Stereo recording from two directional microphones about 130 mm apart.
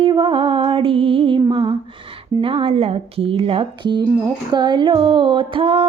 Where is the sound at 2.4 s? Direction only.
45° right (ahead or behind).